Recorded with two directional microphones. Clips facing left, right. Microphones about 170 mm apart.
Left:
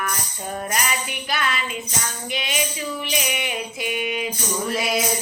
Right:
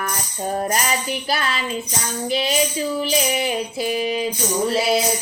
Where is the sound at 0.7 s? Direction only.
35° right (ahead or behind).